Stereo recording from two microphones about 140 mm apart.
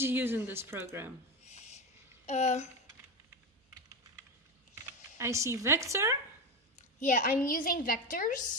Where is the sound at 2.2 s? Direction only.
55° left (ahead or behind).